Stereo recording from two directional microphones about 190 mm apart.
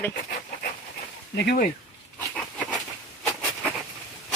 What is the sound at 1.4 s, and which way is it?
Speech, 60° left (ahead or behind).